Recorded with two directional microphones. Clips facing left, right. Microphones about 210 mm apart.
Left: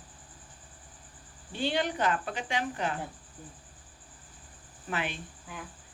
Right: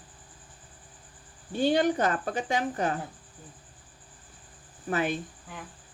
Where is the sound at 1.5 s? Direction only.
40° right (ahead or behind).